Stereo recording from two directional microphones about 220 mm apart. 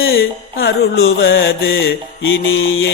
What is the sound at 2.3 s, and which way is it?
Mantra, 65° left (ahead or behind).